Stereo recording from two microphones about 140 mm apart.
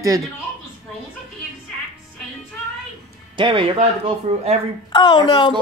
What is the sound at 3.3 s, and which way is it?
Speech, 35° right (ahead or behind).